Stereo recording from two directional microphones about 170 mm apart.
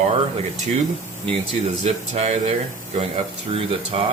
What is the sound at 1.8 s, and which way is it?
Speech, 40° right (ahead or behind).